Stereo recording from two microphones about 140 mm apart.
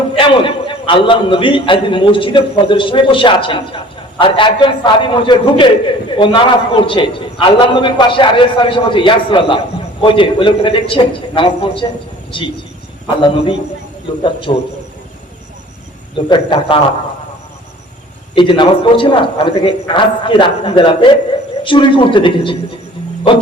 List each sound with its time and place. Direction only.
0.2 s a man's voice: 35° left (ahead or behind)
16.1 s a man's voice: 35° left (ahead or behind)
18.3 s a man's voice: 35° left (ahead or behind)